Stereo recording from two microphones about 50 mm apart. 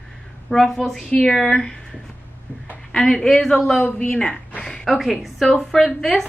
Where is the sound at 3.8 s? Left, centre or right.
Left.